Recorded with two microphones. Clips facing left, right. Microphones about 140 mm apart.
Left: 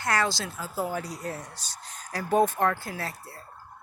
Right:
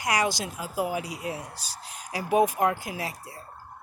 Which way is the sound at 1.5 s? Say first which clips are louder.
Right 3 dB; 35° right (ahead or behind).